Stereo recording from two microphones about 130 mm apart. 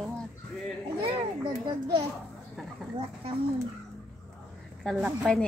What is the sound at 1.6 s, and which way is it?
Speech, 35° right (ahead or behind).